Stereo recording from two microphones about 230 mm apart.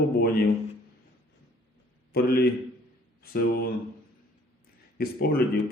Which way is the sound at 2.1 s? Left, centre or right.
Left.